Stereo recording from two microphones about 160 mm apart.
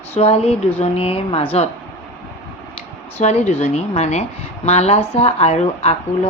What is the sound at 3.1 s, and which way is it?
Speech, 40° left (ahead or behind).